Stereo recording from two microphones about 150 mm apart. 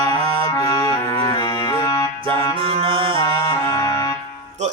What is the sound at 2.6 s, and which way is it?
Music, 35° right (ahead or behind).